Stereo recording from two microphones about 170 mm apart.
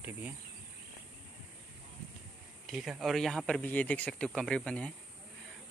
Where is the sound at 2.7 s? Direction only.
Centre (ahead or behind).